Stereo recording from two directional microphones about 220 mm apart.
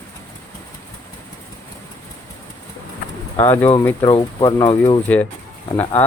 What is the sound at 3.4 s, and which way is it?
Speech, 10° left (ahead or behind).